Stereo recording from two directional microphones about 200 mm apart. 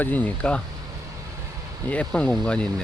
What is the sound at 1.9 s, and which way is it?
Speech, 5° left (ahead or behind).